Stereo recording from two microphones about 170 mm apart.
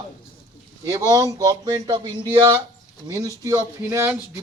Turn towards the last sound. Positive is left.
turn(degrees=-15)  # may be behind; listen again after turning